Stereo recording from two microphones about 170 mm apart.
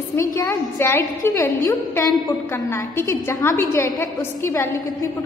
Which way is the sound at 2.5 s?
15° left (ahead or behind).